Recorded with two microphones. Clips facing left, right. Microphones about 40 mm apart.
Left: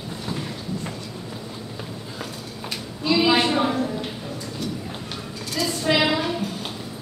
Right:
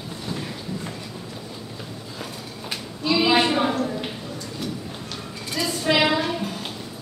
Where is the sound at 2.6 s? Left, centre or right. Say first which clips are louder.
Left 1 dB; centre.